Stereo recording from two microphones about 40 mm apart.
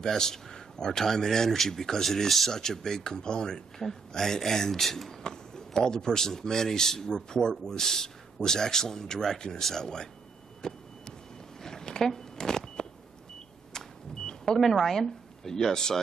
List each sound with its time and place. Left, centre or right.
0.0 s speech: centre
5.2 s speech: centre
11.6 s a sound: centre
12.1 s power windows: centre
13.7 s vehicle: centre
14.6 s speech: centre